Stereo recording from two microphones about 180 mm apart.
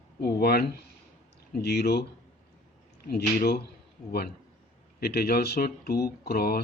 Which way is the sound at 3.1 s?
60° left (ahead or behind).